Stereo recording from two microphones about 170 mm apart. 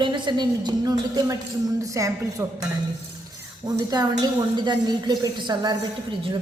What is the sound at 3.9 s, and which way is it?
A man's voice, 25° right (ahead or behind).